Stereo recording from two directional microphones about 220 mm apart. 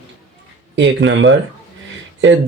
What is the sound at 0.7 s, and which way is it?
Speech, 55° right (ahead or behind).